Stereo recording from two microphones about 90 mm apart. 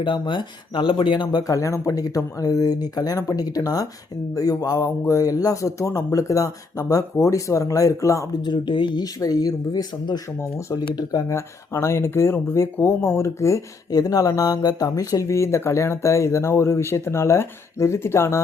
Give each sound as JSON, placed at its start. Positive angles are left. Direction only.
{"t": 0.0, "sound": "speech", "side_deg": 65}
{"t": 8.4, "sound": "speech", "side_deg": 55}
{"t": 9.2, "sound": "speech", "side_deg": 45}
{"t": 11.1, "sound": "speech", "side_deg": 35}